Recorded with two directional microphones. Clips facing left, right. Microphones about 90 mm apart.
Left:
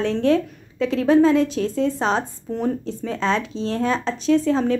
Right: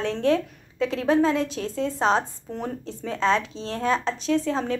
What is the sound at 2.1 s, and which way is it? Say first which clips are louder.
A woman's voice: left 2 dB; 5° right (ahead or behind).